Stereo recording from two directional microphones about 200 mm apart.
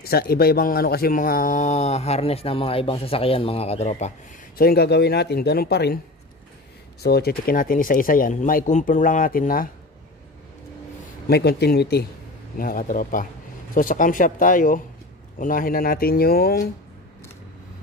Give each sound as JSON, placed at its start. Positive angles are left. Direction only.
{"t": 0.0, "sound": "speech", "side_deg": 50}
{"t": 4.6, "sound": "speech", "side_deg": 50}
{"t": 7.0, "sound": "speech", "side_deg": 50}
{"t": 11.2, "sound": "speech", "side_deg": 55}